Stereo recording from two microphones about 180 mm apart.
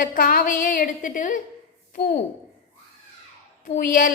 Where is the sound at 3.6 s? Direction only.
45° left (ahead or behind).